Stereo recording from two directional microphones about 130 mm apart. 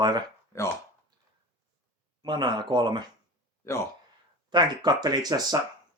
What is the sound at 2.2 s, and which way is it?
Speech, 35° right (ahead or behind).